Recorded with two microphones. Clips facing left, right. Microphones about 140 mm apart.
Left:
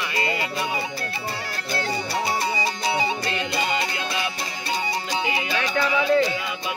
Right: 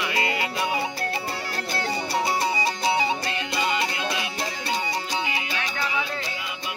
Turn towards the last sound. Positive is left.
turn(degrees=90)